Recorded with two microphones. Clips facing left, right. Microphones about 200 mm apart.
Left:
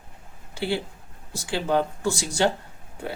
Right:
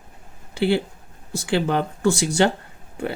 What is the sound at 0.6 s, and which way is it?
Speech, 60° right (ahead or behind).